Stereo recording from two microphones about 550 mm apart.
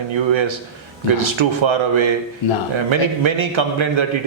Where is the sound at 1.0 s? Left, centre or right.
Right.